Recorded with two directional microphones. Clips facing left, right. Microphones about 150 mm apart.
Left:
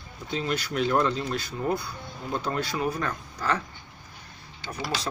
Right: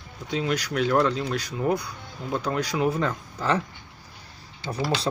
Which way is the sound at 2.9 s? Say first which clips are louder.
Right 4 dB; 25° right (ahead or behind).